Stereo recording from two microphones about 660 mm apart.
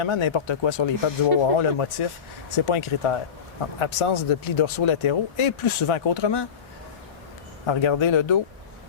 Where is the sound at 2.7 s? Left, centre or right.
Left.